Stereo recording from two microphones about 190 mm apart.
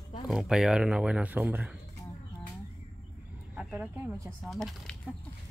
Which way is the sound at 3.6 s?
5° right (ahead or behind).